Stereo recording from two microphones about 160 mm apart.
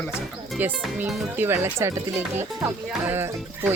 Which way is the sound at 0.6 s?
10° right (ahead or behind).